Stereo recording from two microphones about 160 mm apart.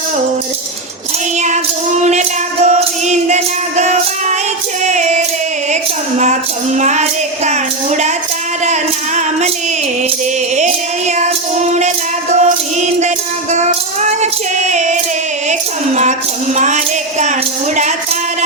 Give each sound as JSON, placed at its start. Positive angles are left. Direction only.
{"t": 1.4, "sound": "music", "side_deg": -45}
{"t": 5.7, "sound": "a sound", "side_deg": -45}
{"t": 6.7, "sound": "music", "side_deg": -45}
{"t": 11.1, "sound": "music", "side_deg": -45}
{"t": 16.6, "sound": "music", "side_deg": -50}